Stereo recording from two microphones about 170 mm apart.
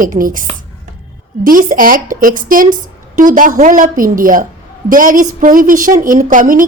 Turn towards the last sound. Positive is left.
turn(degrees=-50)  # may be behind; listen again after turning